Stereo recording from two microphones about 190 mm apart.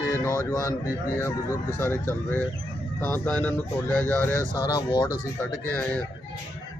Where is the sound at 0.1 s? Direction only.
15° left (ahead or behind).